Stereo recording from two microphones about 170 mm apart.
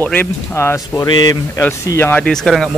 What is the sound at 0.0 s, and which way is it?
Speech, 10° left (ahead or behind).